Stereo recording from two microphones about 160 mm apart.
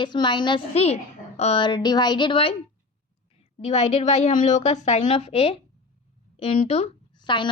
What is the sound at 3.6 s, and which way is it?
A woman's voice, 40° left (ahead or behind).